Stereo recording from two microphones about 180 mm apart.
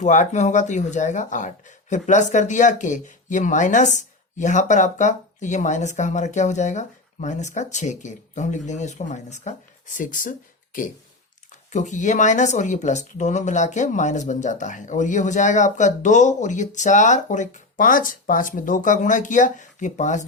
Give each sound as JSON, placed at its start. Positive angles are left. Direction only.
{"t": 0.0, "sound": "speech", "side_deg": 40}